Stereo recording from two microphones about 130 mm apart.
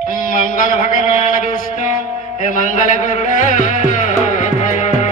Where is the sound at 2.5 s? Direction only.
75° left (ahead or behind).